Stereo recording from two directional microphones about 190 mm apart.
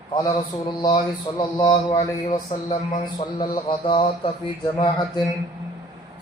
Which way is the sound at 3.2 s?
25° left (ahead or behind).